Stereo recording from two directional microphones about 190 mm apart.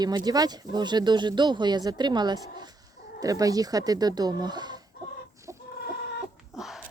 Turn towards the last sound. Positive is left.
turn(degrees=0)  # may be behind; listen again after turning